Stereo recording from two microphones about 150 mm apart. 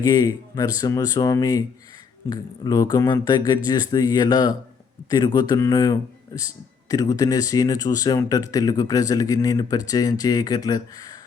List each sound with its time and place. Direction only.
0.0 s speech: 25° left (ahead or behind)